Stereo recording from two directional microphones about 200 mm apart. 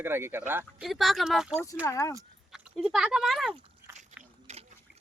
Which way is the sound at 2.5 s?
Centre (ahead or behind).